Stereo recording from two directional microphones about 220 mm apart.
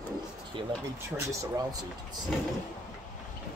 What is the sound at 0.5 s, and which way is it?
A man's voice, 20° right (ahead or behind).